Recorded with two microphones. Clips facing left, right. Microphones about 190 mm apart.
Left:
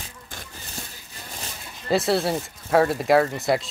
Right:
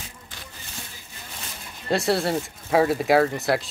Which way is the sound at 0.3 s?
50° left (ahead or behind).